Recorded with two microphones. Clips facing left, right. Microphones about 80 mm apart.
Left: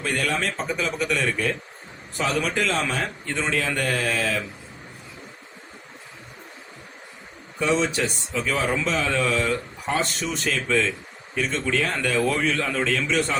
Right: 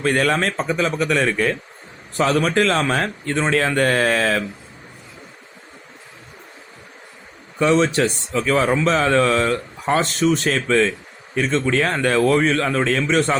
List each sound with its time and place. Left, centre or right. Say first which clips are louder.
0.0 s a man's voice: right 7 dB; right
7.6 s speech: right 6 dB; right
8.4 s speech: right 6 dB; right